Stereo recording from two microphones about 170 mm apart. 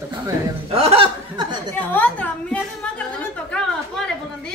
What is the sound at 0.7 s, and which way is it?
Chuckle, 35° right (ahead or behind).